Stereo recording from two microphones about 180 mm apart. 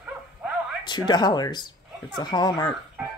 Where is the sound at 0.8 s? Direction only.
25° left (ahead or behind).